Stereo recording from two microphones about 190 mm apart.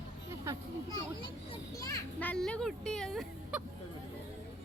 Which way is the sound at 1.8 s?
15° left (ahead or behind).